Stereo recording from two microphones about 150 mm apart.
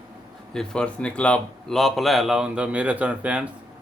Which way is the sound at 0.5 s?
5° left (ahead or behind).